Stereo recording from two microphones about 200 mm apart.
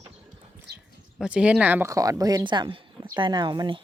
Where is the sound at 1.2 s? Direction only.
5° right (ahead or behind).